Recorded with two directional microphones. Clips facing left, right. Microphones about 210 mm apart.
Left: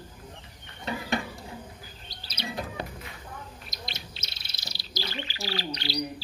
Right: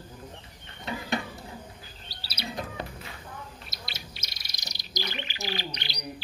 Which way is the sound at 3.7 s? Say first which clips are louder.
Left 2 dB; 5° right (ahead or behind).